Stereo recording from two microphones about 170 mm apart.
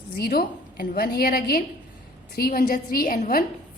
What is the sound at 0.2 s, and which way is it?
A woman's voice, 65° left (ahead or behind).